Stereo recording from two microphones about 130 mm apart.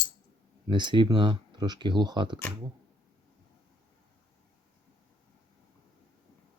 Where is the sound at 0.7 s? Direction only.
35° right (ahead or behind).